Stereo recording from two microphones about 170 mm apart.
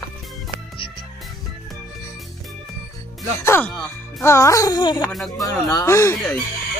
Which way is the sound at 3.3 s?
15° left (ahead or behind).